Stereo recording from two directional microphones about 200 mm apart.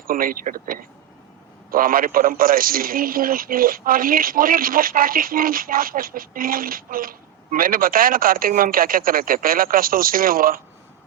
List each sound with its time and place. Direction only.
0.1 s a man's voice: 45° right (ahead or behind)